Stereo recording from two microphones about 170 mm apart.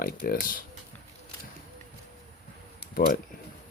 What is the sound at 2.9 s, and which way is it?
Speech, 60° left (ahead or behind).